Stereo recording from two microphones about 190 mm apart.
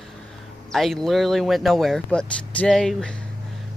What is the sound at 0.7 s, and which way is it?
Speech, centre (ahead or behind).